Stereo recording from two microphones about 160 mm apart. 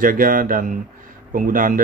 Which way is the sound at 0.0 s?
60° right (ahead or behind).